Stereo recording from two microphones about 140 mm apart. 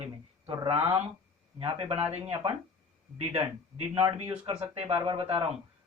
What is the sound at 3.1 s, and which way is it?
Speech, 50° right (ahead or behind).